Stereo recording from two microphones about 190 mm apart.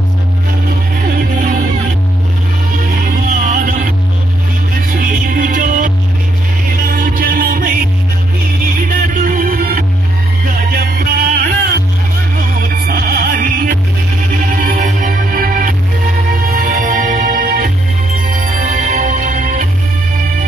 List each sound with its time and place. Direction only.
0.9 s music: 45° right (ahead or behind)
3.3 s music: 45° right (ahead or behind)
6.9 s music: 50° right (ahead or behind)
8.8 s music: 45° right (ahead or behind)